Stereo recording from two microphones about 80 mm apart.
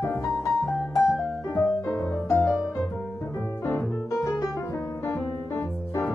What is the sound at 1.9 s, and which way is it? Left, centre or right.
Music, left.